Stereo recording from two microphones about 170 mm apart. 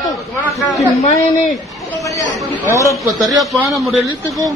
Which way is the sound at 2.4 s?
10° right (ahead or behind).